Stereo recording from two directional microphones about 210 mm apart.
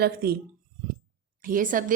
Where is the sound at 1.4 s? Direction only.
40° right (ahead or behind).